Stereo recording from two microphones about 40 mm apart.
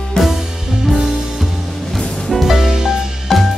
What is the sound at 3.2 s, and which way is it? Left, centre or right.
Music, centre.